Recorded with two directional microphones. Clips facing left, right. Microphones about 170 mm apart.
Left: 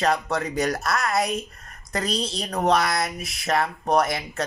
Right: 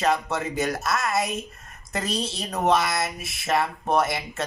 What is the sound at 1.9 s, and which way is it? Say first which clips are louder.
A woman's voice: left 2 dB; 25° right (ahead or behind).